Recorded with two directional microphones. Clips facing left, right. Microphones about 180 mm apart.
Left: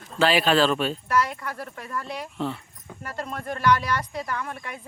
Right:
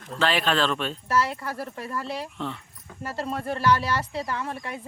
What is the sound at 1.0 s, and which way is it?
Speech, 30° right (ahead or behind).